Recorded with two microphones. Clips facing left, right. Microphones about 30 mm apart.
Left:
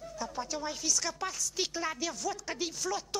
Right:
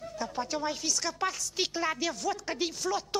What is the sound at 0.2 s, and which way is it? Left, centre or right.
A man's voice, right.